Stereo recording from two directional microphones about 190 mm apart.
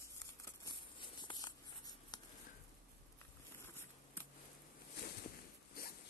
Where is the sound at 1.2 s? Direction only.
20° left (ahead or behind).